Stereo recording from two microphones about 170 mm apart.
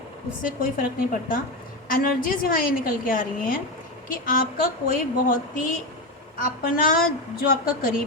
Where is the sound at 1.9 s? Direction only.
55° left (ahead or behind).